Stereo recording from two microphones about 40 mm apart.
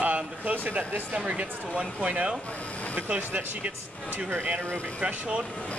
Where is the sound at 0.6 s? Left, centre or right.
Right.